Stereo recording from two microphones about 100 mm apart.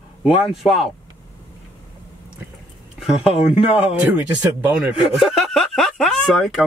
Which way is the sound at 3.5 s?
70° left (ahead or behind).